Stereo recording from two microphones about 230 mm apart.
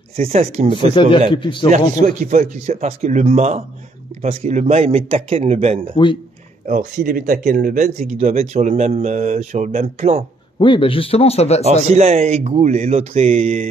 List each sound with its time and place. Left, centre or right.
0.1 s speech: right
1.3 s speech: left
1.7 s speech: right
10.6 s speech: left
11.9 s speech: right